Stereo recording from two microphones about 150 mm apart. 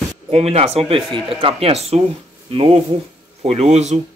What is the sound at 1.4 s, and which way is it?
Speech, 45° right (ahead or behind).